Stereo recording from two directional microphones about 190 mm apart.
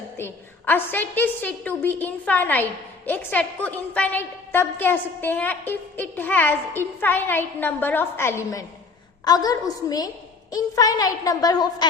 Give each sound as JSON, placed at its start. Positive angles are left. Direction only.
{"t": 0.2, "sound": "a woman's voice", "side_deg": 10}